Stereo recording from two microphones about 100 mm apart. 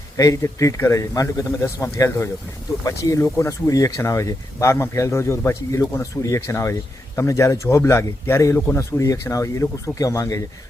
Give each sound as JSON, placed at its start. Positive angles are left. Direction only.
{"t": 0.2, "sound": "a man's voice", "side_deg": 30}
{"t": 8.5, "sound": "speech", "side_deg": 20}
{"t": 8.8, "sound": "a man's voice", "side_deg": 30}